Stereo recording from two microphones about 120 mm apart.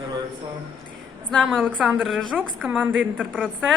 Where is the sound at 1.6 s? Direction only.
10° right (ahead or behind).